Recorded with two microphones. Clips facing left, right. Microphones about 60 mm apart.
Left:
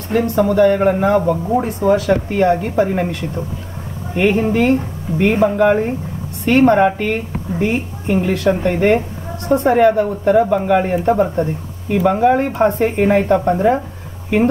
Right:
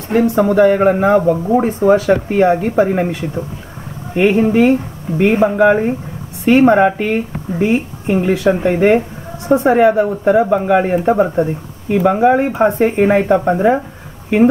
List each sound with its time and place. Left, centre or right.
0.4 s speech: centre